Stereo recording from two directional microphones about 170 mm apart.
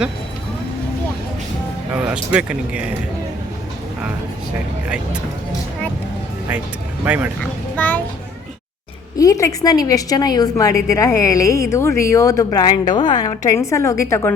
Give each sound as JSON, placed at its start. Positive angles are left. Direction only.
{"t": 1.9, "sound": "speech", "side_deg": -10}
{"t": 7.0, "sound": "speech", "side_deg": -10}
{"t": 7.8, "sound": "a child's voice", "side_deg": 10}
{"t": 9.1, "sound": "a woman's voice", "side_deg": 20}